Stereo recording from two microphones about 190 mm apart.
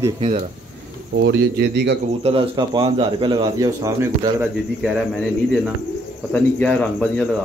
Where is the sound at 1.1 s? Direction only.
70° right (ahead or behind).